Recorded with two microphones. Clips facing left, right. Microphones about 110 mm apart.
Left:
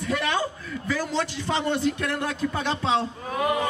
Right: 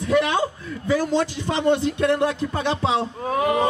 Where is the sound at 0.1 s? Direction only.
20° right (ahead or behind).